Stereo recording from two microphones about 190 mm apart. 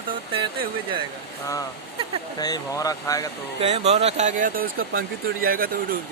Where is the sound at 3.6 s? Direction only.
35° right (ahead or behind).